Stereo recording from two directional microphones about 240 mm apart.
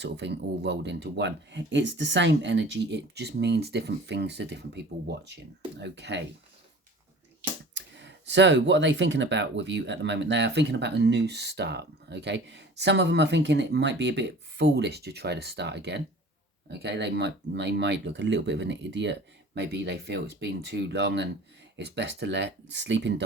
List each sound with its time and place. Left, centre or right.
0.0 s speech: right
7.7 s speech: right